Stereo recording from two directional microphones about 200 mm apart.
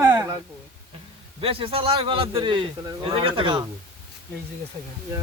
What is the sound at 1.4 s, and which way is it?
A man's voice, 25° right (ahead or behind).